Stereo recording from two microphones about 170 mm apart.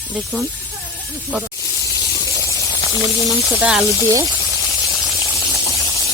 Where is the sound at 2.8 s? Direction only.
20° right (ahead or behind).